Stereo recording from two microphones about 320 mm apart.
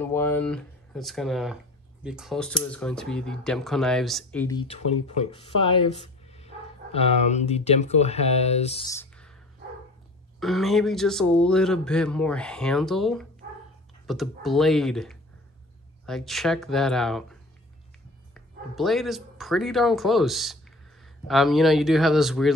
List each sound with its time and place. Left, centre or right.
0.0 s a man's voice: centre
10.4 s a man's voice: centre